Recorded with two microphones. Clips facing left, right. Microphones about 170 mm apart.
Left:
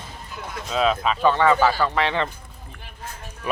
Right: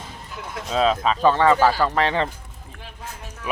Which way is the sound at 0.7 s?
35° right (ahead or behind).